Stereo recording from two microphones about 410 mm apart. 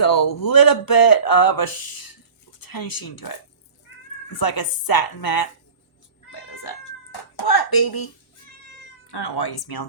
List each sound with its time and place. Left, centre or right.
0.0 s speech: left
6.6 s cat: left
9.0 s speech: left